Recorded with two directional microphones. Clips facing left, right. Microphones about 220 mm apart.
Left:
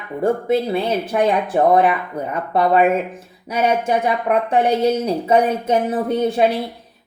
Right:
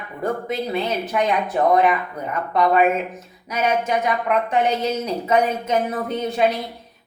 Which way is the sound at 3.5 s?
30° left (ahead or behind).